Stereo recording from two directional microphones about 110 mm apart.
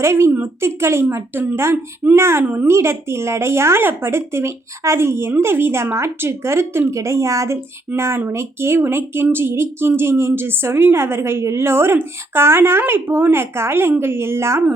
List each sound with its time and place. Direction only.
0.0 s speech: 25° right (ahead or behind)
2.4 s a woman's voice: 10° right (ahead or behind)
2.6 s speech: 25° right (ahead or behind)